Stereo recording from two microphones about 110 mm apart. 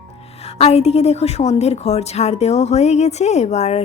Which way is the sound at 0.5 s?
70° left (ahead or behind).